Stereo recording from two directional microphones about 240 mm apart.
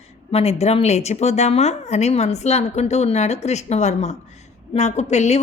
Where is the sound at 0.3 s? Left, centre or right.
Left.